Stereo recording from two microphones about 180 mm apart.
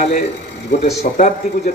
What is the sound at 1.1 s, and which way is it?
Speech, 50° left (ahead or behind).